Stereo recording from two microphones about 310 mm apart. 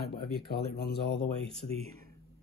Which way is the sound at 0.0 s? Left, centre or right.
Left.